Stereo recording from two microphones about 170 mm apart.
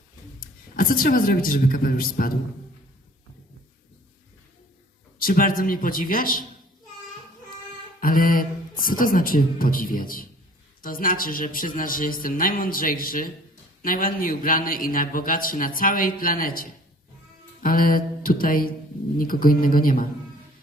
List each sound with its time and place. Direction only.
0.3 s speech: 55° left (ahead or behind)
5.2 s a man's voice: 55° left (ahead or behind)
8.0 s a man's voice: 55° left (ahead or behind)